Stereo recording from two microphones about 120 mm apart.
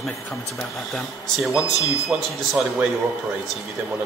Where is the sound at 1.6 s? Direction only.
25° left (ahead or behind).